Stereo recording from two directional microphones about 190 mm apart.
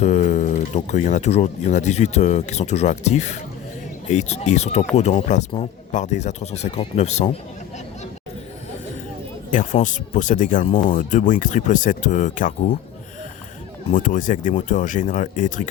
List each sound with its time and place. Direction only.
0.0 s speech: 35° left (ahead or behind)
9.5 s speech: 40° left (ahead or behind)
13.9 s speech: 45° left (ahead or behind)